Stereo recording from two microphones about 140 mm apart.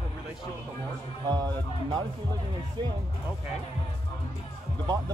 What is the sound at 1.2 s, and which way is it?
Speech, 30° right (ahead or behind).